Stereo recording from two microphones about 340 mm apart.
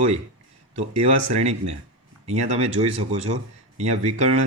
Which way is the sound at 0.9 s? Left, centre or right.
Centre.